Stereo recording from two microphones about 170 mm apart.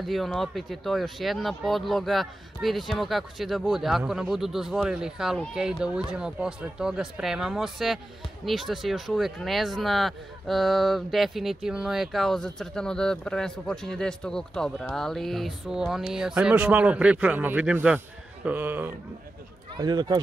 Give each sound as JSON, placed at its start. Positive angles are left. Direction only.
{"t": 0.0, "sound": "speech", "side_deg": 0}
{"t": 19.8, "sound": "speech", "side_deg": -25}